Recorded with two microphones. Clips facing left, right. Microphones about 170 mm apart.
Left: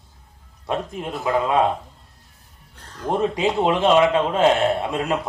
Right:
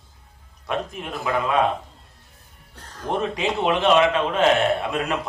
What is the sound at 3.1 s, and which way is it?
A man's voice, 25° left (ahead or behind).